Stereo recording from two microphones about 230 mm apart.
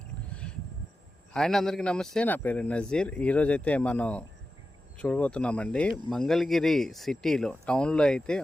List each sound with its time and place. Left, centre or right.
1.3 s speech: centre